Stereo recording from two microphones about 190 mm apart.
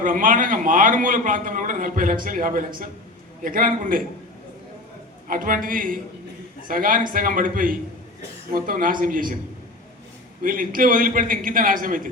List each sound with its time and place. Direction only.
0.0 s a man's voice: 45° right (ahead or behind)
5.3 s a man's voice: 45° right (ahead or behind)
10.4 s a man's voice: 45° right (ahead or behind)